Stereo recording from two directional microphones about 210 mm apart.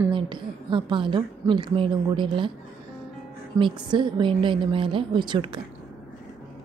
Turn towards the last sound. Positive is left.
turn(degrees=-25)  # may be behind; listen again after turning